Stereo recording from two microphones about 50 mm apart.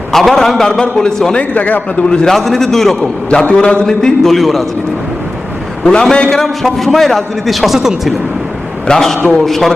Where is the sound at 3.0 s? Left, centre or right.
Left.